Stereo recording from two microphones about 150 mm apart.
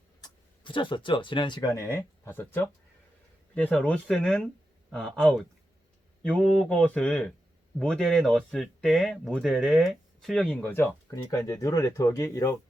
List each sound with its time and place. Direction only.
0.2 s speech: 30° left (ahead or behind); by 10.6 s centre (ahead or behind)
10.6 s speech: 15° left (ahead or behind)